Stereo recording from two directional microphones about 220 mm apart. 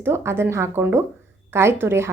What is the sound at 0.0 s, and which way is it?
A woman's voice, 10° right (ahead or behind).